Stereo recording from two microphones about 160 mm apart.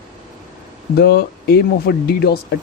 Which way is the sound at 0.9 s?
90° left.